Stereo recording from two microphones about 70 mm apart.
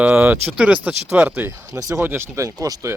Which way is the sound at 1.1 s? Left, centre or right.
Right.